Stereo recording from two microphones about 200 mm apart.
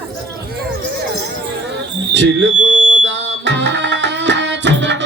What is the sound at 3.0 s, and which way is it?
Tabla, 65° right (ahead or behind).